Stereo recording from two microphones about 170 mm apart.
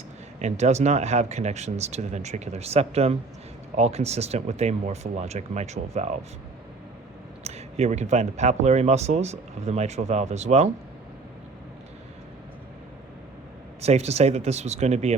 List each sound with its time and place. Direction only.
0.3 s speech: 40° right (ahead or behind)
7.4 s speech: 40° right (ahead or behind)
13.8 s speech: 40° right (ahead or behind)